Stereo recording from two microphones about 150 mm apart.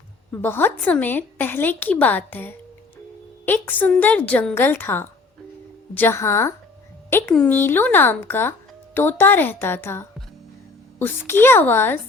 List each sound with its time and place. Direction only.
0.3 s a woman's voice: 15° left (ahead or behind)